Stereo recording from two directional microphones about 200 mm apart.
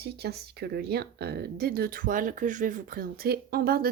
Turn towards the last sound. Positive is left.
turn(degrees=-50)  # may be behind; listen again after turning